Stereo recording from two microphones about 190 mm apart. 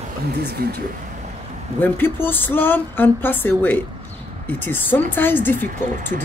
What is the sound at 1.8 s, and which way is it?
A woman's voice, 10° left (ahead or behind).